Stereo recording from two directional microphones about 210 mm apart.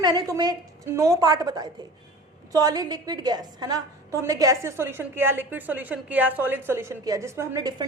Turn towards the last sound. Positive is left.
turn(degrees=-20)  # may be behind; listen again after turning